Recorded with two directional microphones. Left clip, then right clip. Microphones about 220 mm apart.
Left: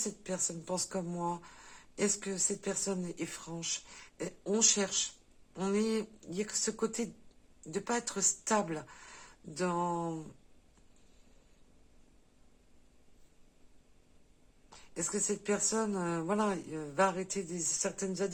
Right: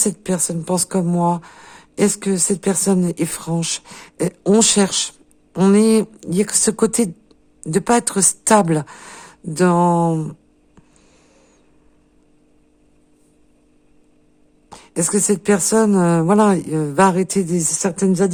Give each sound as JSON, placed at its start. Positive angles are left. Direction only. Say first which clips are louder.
{"t": 0.0, "sound": "speech", "louder": "right 16 dB", "side_deg": -50}
{"t": 14.7, "sound": "speech", "louder": "right 17 dB", "side_deg": -50}